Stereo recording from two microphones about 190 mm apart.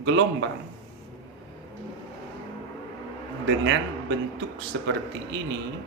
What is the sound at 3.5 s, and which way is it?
A man's voice, 70° right (ahead or behind).